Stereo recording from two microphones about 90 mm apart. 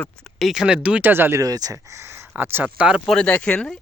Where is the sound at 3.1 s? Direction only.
10° left (ahead or behind).